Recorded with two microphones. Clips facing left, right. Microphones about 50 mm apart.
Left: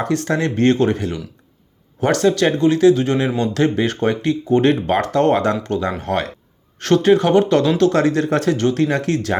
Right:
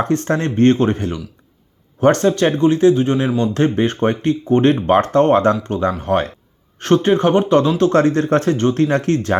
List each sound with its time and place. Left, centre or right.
0.0 s speech: right